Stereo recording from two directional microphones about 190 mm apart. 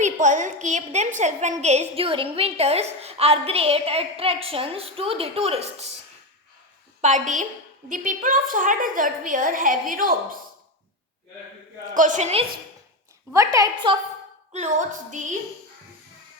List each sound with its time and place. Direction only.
0.0 s a woman's voice: 40° right (ahead or behind)
7.0 s a woman's voice: 40° right (ahead or behind)
11.9 s a woman's voice: 40° right (ahead or behind)
13.3 s a woman's voice: 15° right (ahead or behind)
14.5 s a woman's voice: 40° right (ahead or behind)